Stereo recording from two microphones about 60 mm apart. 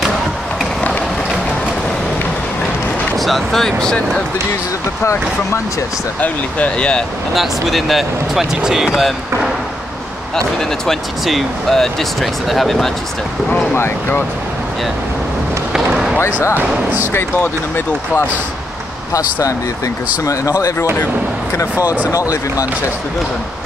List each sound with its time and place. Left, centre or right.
0.7 s run: left
3.2 s speech: centre
5.0 s speech: left
6.2 s speech: centre
7.3 s speech: centre
10.9 s speech: centre
13.7 s speech: left
15.9 s basketball bounce: centre
20.2 s speech: left
22.1 s speech: left